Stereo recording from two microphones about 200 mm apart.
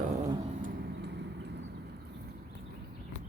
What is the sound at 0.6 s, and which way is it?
Vehicle, 50° right (ahead or behind).